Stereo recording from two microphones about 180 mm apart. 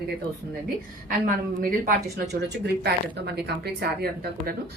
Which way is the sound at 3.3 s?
65° right (ahead or behind).